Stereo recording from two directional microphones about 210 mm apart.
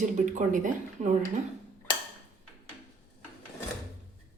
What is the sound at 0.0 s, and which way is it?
Speech, 35° right (ahead or behind).